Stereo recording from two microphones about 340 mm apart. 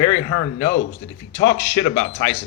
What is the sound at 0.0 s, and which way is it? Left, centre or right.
Speech, left.